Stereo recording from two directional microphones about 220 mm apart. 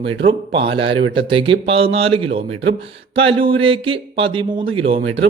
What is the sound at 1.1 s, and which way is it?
Speech, 25° right (ahead or behind).